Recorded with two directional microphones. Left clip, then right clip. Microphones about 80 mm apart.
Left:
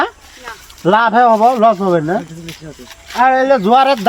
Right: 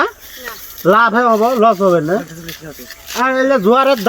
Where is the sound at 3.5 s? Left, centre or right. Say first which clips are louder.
Left 1 dB; left.